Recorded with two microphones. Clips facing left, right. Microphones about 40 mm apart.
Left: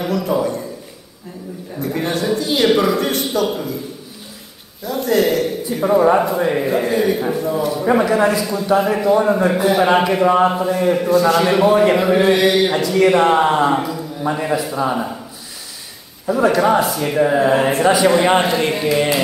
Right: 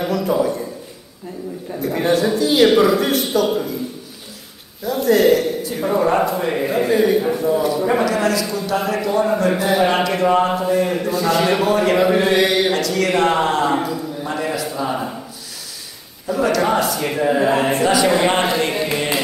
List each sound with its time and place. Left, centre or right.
0.0 s a man's voice: centre
1.8 s a man's voice: centre
4.8 s a man's voice: centre
7.7 s a man's voice: centre
8.5 s a man's voice: centre
16.3 s a man's voice: centre
16.6 s a man's voice: centre